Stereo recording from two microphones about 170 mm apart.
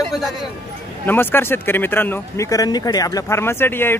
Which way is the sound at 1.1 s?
15° left (ahead or behind).